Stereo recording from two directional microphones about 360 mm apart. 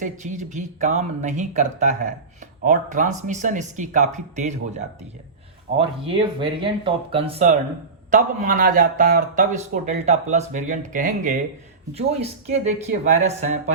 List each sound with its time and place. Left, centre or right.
0.0 s a man's voice: centre